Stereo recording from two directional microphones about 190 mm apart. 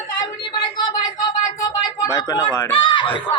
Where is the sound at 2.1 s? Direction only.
15° left (ahead or behind).